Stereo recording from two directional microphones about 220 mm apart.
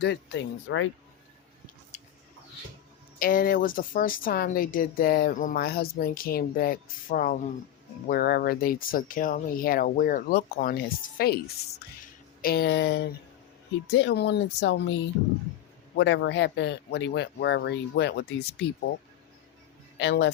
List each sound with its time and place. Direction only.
0.0 s speech: 50° left (ahead or behind)
1.9 s a sound: 30° left (ahead or behind)
3.2 s speech: 40° left (ahead or behind)
12.4 s speech: 45° left (ahead or behind)
16.0 s speech: 55° left (ahead or behind)
20.0 s speech: 55° left (ahead or behind)